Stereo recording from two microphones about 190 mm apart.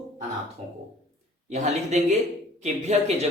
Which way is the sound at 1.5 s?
35° right (ahead or behind).